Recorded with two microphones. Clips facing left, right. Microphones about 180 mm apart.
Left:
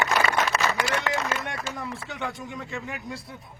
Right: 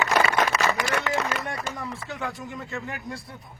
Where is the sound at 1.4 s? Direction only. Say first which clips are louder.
Right 1 dB; centre (ahead or behind).